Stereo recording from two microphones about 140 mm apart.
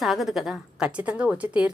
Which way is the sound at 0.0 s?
Centre (ahead or behind).